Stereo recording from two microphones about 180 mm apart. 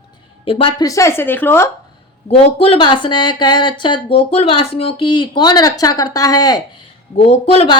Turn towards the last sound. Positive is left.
turn(degrees=30)  # may be behind; listen again after turning